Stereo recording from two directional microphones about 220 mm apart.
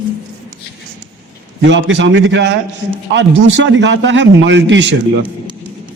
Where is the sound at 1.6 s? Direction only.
55° right (ahead or behind).